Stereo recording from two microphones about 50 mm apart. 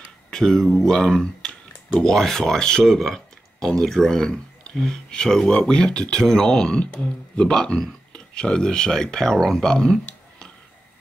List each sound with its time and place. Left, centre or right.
0.3 s speech: centre